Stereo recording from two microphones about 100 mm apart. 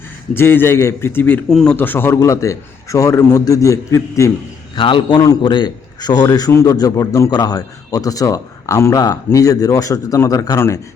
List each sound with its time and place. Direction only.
0.3 s a man's voice: 20° left (ahead or behind)
1.5 s a man's voice: 5° left (ahead or behind)
1.7 s a man's voice: 20° left (ahead or behind)
2.1 s a man's voice: 30° left (ahead or behind)
4.7 s a man's voice: 55° left (ahead or behind); by 10.6 s 35° left (ahead or behind)